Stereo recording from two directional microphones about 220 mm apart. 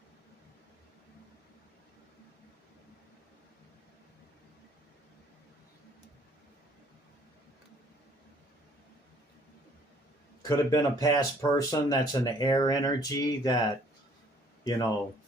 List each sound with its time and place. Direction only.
10.4 s speech: 15° left (ahead or behind)
14.6 s speech: 15° left (ahead or behind)